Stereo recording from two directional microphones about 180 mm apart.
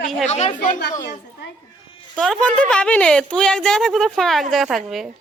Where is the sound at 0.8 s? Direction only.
60° left (ahead or behind).